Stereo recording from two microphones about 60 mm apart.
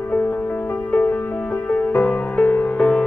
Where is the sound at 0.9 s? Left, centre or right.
Left.